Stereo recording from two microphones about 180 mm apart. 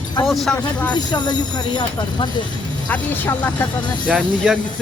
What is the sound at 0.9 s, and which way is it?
Speech, 25° left (ahead or behind).